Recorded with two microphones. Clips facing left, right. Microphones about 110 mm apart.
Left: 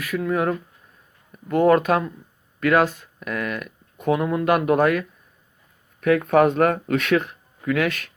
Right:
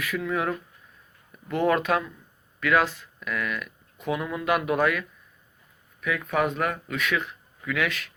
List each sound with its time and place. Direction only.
0.0 s speech: 40° left (ahead or behind); by 7.2 s 55° left (ahead or behind)
7.2 s speech: 40° left (ahead or behind)